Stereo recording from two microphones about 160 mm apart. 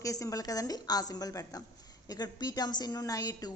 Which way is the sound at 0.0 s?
20° left (ahead or behind).